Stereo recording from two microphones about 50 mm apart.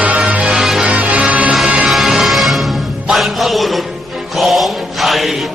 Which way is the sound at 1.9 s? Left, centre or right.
Centre.